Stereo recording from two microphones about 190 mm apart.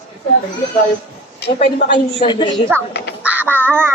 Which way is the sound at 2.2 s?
25° left (ahead or behind).